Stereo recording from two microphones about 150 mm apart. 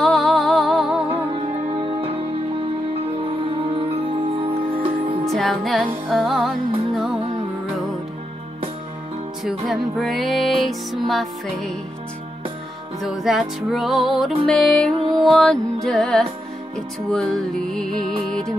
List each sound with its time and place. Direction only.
0.0 s music: centre (ahead or behind)
1.3 s music: 35° right (ahead or behind)
3.3 s music: 35° right (ahead or behind)
5.2 s music: centre (ahead or behind)
9.7 s music: centre (ahead or behind)
13.0 s music: centre (ahead or behind)